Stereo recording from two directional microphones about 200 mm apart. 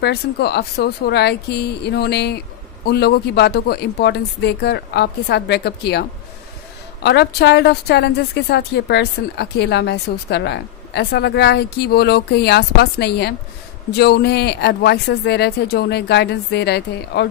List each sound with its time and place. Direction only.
0.0 s a woman's voice: 55° left (ahead or behind)